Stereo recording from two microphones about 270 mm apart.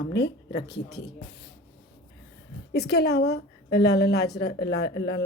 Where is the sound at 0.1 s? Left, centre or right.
Left.